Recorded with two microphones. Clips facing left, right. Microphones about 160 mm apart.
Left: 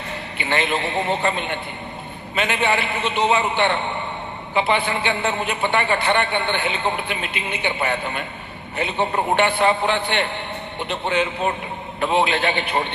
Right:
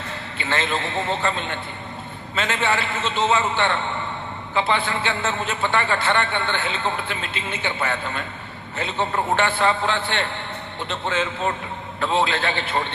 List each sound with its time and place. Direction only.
0.3 s a man's voice: 15° left (ahead or behind)